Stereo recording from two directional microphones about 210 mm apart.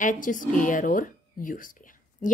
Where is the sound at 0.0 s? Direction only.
40° left (ahead or behind).